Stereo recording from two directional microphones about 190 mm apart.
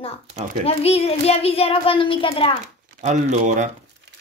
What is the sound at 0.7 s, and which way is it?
A child's voice, 30° left (ahead or behind).